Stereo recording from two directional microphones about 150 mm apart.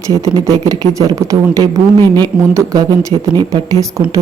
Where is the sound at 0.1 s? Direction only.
25° right (ahead or behind).